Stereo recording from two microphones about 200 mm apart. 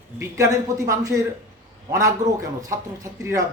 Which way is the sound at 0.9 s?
15° right (ahead or behind).